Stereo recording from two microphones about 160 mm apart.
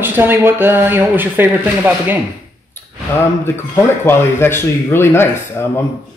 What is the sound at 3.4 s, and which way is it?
Speech, 15° left (ahead or behind).